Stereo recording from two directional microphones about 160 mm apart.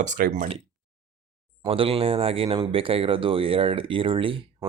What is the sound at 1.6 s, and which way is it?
Speech, 35° right (ahead or behind).